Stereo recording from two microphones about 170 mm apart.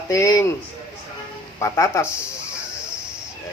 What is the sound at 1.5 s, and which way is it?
Speech, 20° left (ahead or behind).